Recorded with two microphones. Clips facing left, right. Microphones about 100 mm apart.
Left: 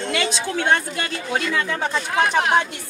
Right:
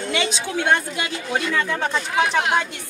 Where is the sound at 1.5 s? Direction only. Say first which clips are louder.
Right 1 dB; 5° left (ahead or behind).